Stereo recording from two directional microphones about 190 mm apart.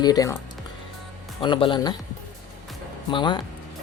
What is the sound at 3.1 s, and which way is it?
Speech, 25° left (ahead or behind).